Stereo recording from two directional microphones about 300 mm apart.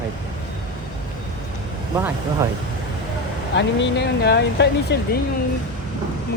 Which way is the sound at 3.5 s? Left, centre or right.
Left.